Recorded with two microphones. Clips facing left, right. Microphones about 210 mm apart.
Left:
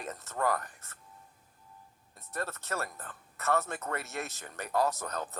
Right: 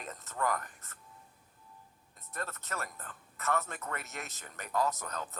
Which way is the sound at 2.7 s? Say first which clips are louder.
Left 4 dB; 40° left (ahead or behind).